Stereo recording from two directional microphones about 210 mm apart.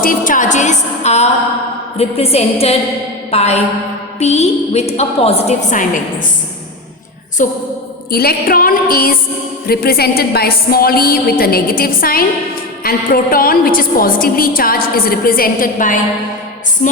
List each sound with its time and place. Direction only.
0.0 s a woman's voice: 40° left (ahead or behind)
7.4 s a woman's voice: 35° left (ahead or behind)
16.8 s music: 35° left (ahead or behind)